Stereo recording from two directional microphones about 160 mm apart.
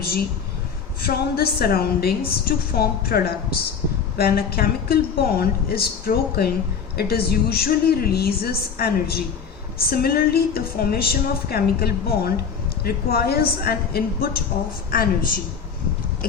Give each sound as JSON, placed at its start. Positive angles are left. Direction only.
{"t": 1.0, "sound": "a woman's voice", "side_deg": 70}